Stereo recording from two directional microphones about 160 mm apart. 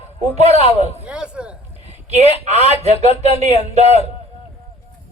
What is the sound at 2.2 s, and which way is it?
Speech, 40° right (ahead or behind).